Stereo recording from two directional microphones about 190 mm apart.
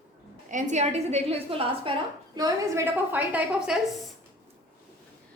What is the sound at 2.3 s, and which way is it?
A woman's voice, 15° right (ahead or behind).